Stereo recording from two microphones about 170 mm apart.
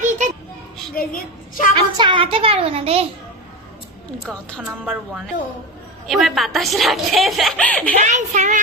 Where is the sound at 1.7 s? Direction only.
30° right (ahead or behind).